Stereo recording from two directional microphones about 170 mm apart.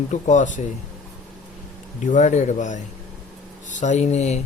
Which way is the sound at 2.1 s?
45° left (ahead or behind).